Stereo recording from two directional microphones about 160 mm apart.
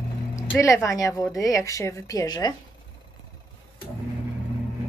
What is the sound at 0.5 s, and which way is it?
A woman's voice, 20° left (ahead or behind).